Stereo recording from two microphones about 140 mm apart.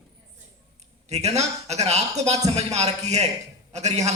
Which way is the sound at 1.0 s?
50° right (ahead or behind).